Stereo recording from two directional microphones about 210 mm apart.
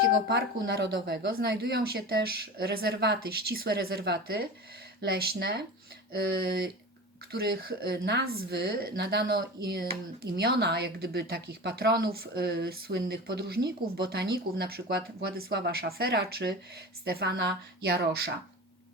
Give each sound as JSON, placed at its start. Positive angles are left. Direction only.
{"t": 0.3, "sound": "speech", "side_deg": -50}